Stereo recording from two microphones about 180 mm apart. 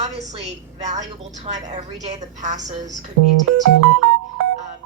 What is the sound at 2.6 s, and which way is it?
Speech, 20° right (ahead or behind).